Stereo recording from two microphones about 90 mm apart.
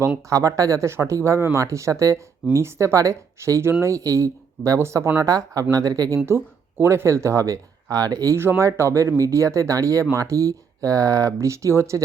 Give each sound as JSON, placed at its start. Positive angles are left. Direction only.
{"t": 0.3, "sound": "speech", "side_deg": -40}
{"t": 6.2, "sound": "speech", "side_deg": -25}